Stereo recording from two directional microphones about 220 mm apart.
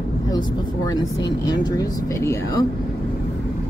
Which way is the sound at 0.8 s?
15° left (ahead or behind).